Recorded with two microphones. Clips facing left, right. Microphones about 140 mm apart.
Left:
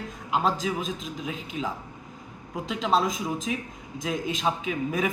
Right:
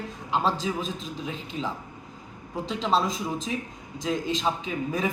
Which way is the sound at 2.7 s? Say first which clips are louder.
Left 1 dB; 5° left (ahead or behind).